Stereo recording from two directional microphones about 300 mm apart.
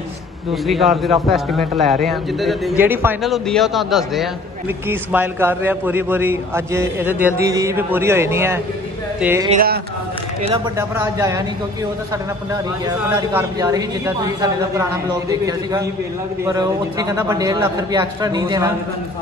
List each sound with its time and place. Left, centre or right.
0.7 s a man's voice: centre
9.5 s speech: right
10.4 s a man's voice: centre
12.8 s a man's voice: centre